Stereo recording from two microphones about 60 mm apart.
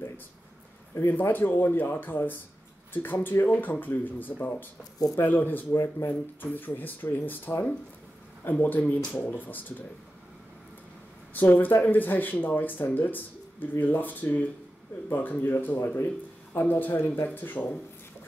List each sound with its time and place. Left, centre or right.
0.9 s speech: left
11.3 s speech: left